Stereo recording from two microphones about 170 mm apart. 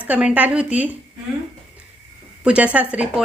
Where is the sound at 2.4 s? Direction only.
5° right (ahead or behind).